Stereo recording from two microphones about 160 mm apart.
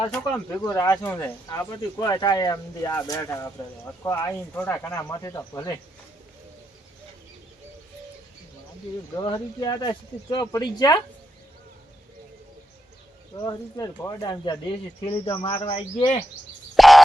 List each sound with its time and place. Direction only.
0.2 s speech: 15° left (ahead or behind)
9.1 s speech: 25° left (ahead or behind)
13.4 s speech: 25° left (ahead or behind); by 16.2 s 40° left (ahead or behind)
16.7 s a sound: centre (ahead or behind)